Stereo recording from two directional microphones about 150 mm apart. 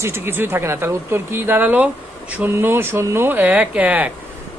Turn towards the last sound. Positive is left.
turn(degrees=-10)  # may be behind; listen again after turning